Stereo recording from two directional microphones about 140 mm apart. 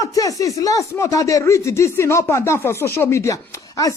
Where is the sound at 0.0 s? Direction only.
25° left (ahead or behind).